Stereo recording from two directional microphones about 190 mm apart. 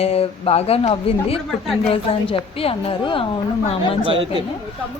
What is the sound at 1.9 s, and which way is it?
A woman's voice, 30° left (ahead or behind).